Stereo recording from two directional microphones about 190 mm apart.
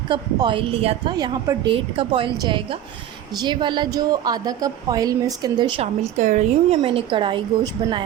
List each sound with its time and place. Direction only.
0.1 s a woman's voice: 25° right (ahead or behind)